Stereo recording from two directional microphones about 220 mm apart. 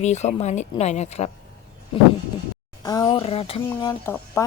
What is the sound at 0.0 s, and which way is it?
Speech, 30° left (ahead or behind).